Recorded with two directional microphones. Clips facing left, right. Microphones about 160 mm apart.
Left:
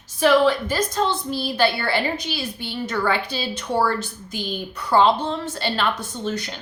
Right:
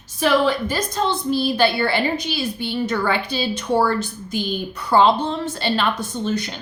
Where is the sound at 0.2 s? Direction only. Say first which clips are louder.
Left 1 dB; 20° right (ahead or behind).